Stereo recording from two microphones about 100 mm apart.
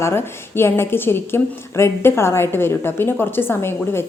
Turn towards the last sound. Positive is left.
turn(degrees=25)  # may be behind; listen again after turning